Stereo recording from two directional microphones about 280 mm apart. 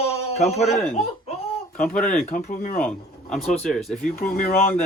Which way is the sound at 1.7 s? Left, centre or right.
Left.